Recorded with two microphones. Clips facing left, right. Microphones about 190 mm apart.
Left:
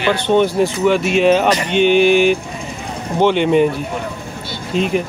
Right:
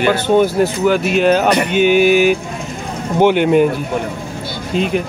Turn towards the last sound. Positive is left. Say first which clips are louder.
# even
turn(degrees=0)  # may be behind; listen again after turning